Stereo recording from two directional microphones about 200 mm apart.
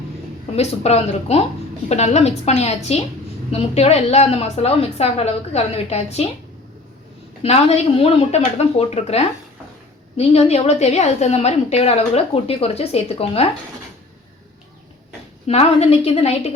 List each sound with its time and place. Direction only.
0.5 s a woman's voice: 30° left (ahead or behind)
7.4 s a woman's voice: 30° left (ahead or behind)
15.4 s a woman's voice: 30° left (ahead or behind)